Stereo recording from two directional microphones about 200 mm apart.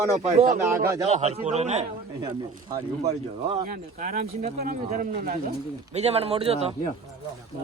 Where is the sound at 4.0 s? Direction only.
40° right (ahead or behind).